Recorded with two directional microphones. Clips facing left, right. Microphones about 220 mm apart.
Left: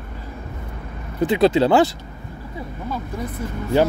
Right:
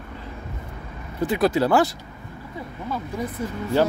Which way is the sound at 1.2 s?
25° left (ahead or behind).